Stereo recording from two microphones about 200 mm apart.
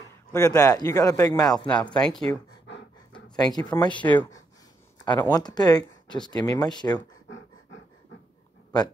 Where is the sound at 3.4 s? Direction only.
20° left (ahead or behind).